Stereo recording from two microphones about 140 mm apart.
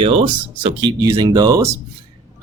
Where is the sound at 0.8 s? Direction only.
30° right (ahead or behind).